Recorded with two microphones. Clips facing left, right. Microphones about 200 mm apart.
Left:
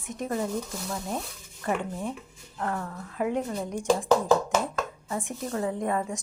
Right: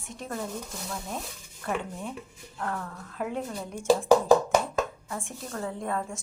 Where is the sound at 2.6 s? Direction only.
5° left (ahead or behind).